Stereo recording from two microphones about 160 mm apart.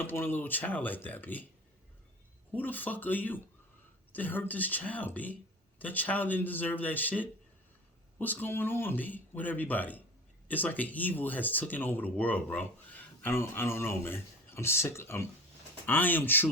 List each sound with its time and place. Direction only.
0.0 s speech: 15° left (ahead or behind)
2.5 s speech: 10° left (ahead or behind)